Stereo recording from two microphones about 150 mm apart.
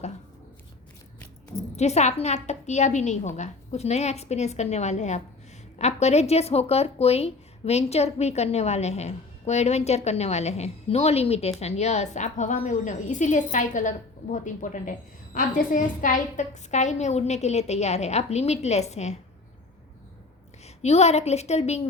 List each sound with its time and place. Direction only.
1.7 s a woman's voice: 50° left (ahead or behind)
20.7 s a woman's voice: 45° left (ahead or behind)